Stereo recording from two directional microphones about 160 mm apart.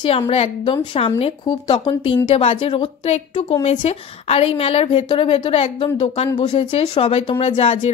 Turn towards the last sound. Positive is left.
turn(degrees=35)  # may be behind; listen again after turning